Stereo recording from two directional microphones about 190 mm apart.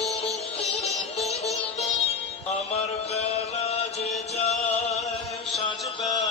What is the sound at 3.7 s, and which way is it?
Music, 35° left (ahead or behind).